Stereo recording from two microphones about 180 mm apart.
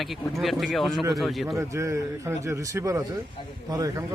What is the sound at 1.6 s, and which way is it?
Speech, 15° right (ahead or behind).